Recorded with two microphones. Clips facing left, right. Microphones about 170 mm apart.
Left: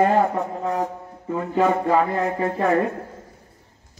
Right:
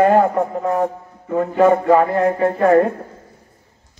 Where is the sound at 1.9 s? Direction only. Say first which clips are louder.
Right 6 dB; 50° right (ahead or behind).